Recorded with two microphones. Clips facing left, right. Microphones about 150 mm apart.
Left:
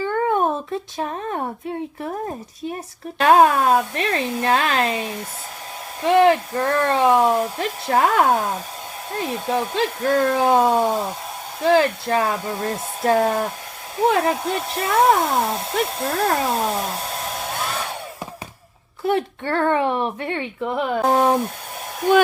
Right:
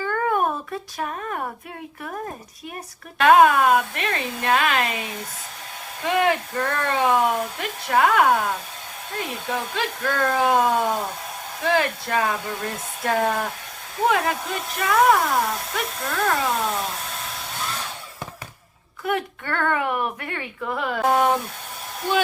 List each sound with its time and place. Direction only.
0.0 s a child's voice: 25° left (ahead or behind)
19.0 s a child's voice: 30° left (ahead or behind)